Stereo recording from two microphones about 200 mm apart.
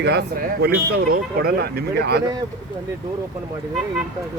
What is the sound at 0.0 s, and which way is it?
Speech, 55° right (ahead or behind).